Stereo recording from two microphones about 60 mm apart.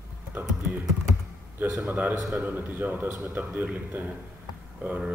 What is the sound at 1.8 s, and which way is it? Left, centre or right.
A man's voice, right.